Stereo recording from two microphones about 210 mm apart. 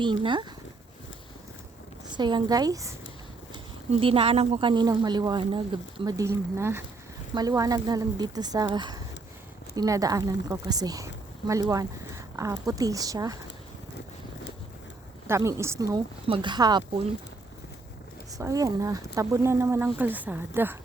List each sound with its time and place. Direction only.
0.0 s speech: 25° right (ahead or behind)
2.1 s speech: 20° right (ahead or behind)
4.0 s a woman's voice: 25° right (ahead or behind)
15.3 s speech: 15° right (ahead or behind)
18.3 s speech: 15° right (ahead or behind)